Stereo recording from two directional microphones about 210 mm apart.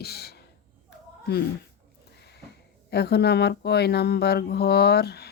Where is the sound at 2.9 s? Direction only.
50° left (ahead or behind).